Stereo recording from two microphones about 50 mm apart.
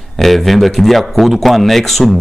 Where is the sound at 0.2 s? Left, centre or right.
Centre.